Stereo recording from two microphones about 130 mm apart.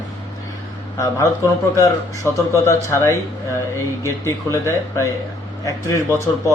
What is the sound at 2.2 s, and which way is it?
Speech, 20° left (ahead or behind).